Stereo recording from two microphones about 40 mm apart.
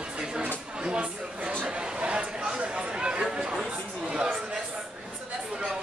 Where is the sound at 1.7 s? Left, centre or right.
Right.